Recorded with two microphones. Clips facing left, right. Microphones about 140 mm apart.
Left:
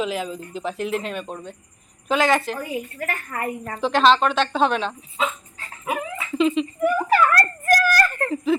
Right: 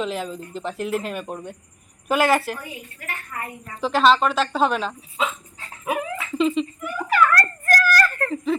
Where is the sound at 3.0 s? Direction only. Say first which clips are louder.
Left 6 dB; 45° left (ahead or behind).